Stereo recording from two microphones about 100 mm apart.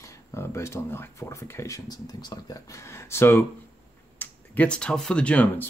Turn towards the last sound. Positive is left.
turn(degrees=10)  # may be behind; listen again after turning